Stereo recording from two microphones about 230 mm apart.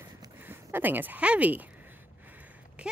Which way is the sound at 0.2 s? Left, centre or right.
Centre.